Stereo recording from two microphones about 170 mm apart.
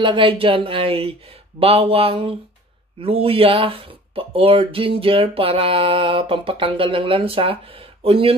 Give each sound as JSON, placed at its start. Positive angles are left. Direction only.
{"t": 0.0, "sound": "speech", "side_deg": -30}